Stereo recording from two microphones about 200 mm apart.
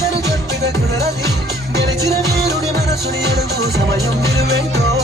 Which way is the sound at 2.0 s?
15° left (ahead or behind).